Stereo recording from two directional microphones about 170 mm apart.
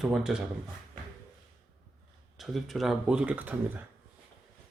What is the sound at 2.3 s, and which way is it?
Speech, centre (ahead or behind).